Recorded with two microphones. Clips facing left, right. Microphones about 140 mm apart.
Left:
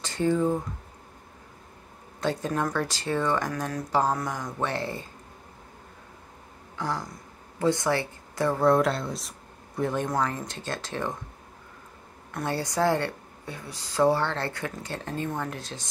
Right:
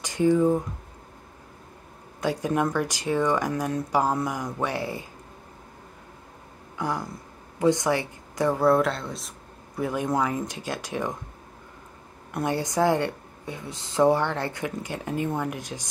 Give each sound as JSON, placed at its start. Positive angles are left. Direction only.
{"t": 0.0, "sound": "speech", "side_deg": -15}
{"t": 2.1, "sound": "speech", "side_deg": -10}
{"t": 6.8, "sound": "speech", "side_deg": -15}
{"t": 12.3, "sound": "speech", "side_deg": -15}